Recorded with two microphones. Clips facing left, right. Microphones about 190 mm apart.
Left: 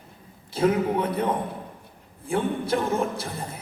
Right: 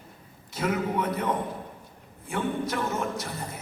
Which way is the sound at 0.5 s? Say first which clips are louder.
Left 5 dB; 30° left (ahead or behind).